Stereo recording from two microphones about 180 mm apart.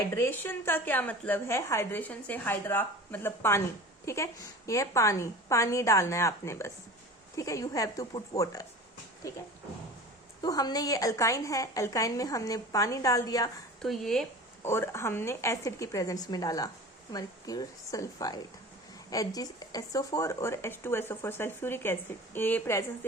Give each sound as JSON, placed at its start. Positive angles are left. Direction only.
{"t": 0.1, "sound": "a woman's voice", "side_deg": 15}
{"t": 10.4, "sound": "a woman's voice", "side_deg": 20}
{"t": 13.8, "sound": "speech", "side_deg": 0}
{"t": 14.6, "sound": "a woman's voice", "side_deg": 15}